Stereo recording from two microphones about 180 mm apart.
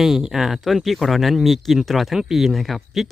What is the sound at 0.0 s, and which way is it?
Speech, centre (ahead or behind).